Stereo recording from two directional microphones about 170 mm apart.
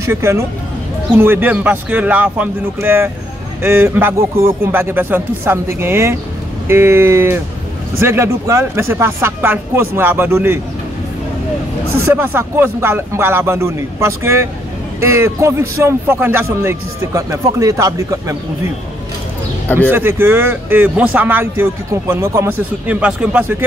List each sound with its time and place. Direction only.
0.0 s speech: 15° right (ahead or behind)
12.1 s speech: 15° right (ahead or behind)
19.9 s speech: 15° right (ahead or behind)